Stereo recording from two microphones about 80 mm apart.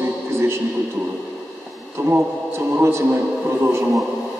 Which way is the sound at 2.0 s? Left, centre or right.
Right.